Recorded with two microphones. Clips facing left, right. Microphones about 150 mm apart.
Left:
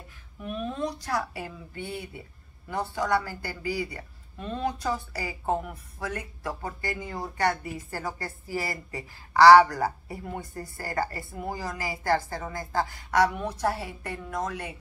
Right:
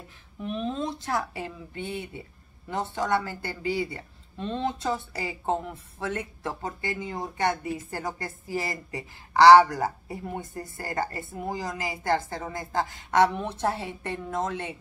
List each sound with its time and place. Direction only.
0.4 s a woman's voice: 25° right (ahead or behind)